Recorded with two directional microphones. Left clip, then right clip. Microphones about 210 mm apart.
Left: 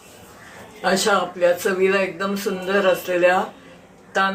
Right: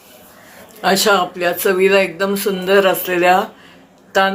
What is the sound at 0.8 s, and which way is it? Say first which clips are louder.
Music: right 5 dB; 50° right (ahead or behind).